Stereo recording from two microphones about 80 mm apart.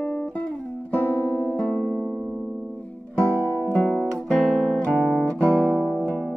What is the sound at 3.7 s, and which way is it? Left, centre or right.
Guitar, centre.